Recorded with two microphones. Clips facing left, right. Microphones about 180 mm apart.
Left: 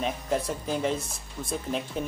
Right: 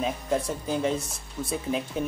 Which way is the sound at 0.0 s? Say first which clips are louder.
Right 1 dB; centre (ahead or behind).